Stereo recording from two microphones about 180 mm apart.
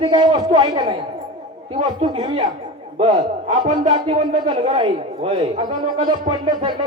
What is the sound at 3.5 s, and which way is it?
Jingle bell, 45° right (ahead or behind).